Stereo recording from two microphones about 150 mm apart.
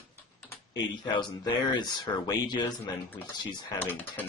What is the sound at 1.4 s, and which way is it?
Speech, 30° left (ahead or behind).